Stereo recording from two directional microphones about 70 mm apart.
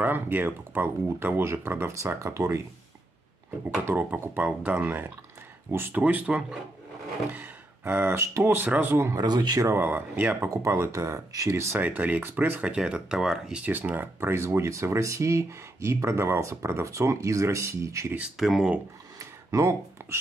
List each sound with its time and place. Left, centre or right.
0.0 s speech: right
3.8 s speech: right
7.3 s speech: right
8.5 s speech: right
9.1 s speech: right
9.8 s speech: right
10.5 s speech: right
11.8 s speech: right
12.6 s speech: centre
13.5 s speech: centre
13.7 s speech: right
14.3 s speech: right
18.4 s speech: centre
19.1 s a sound: right